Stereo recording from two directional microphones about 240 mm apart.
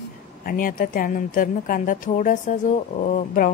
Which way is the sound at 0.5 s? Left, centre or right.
Left.